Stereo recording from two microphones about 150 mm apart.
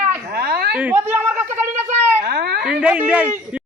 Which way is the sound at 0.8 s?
10° right (ahead or behind).